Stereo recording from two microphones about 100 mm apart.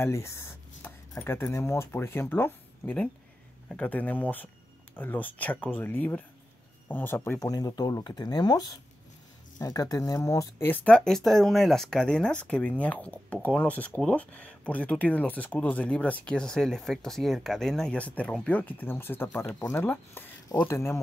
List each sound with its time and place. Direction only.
0.0 s speech: 25° left (ahead or behind)
7.3 s speech: 40° left (ahead or behind)
10.6 s speech: 15° left (ahead or behind)